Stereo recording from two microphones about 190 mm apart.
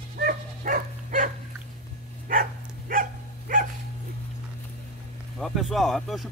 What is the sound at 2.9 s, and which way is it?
Dog, 45° right (ahead or behind).